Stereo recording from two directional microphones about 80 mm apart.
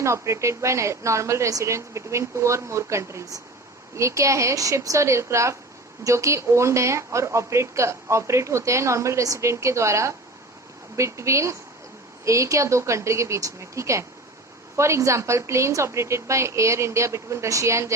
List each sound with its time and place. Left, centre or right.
0.0 s a woman's voice: right